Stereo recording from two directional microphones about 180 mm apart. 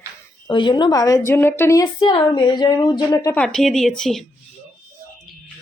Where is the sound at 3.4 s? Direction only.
5° left (ahead or behind).